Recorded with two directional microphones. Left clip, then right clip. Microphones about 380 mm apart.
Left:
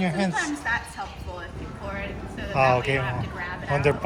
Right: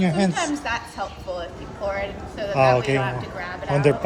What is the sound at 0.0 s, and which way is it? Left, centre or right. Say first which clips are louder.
Speech: right 3 dB; centre.